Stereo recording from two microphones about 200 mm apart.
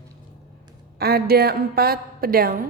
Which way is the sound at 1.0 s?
50° right (ahead or behind).